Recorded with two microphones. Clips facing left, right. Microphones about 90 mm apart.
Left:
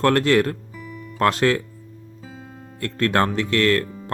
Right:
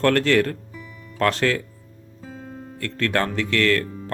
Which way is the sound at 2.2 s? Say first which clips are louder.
Right 4 dB; 5° left (ahead or behind).